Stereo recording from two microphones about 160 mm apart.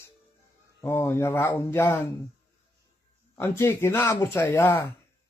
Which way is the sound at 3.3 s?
15° left (ahead or behind).